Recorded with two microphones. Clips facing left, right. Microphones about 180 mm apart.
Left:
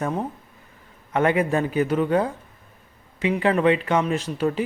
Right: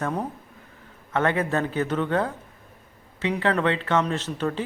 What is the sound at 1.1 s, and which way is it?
Speech, 15° left (ahead or behind).